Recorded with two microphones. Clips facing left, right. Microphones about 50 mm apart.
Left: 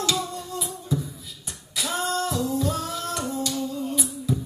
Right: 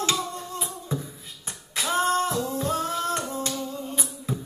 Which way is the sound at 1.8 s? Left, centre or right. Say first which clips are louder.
Right 3 dB; right.